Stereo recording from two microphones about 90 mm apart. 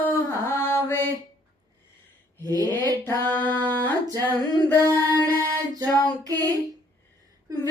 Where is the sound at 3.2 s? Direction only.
20° left (ahead or behind).